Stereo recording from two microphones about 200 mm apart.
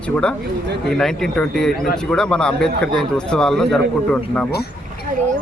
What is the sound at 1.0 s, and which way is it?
Speech, 5° left (ahead or behind).